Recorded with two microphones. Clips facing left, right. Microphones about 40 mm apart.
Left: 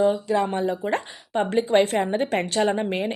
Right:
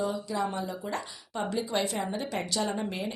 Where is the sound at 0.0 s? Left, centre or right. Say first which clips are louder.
Left 9 dB; left.